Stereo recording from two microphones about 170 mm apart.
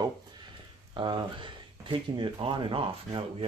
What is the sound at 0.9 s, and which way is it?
Speech, 30° right (ahead or behind).